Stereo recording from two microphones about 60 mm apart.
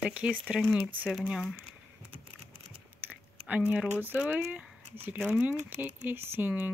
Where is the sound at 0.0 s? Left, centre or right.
Centre.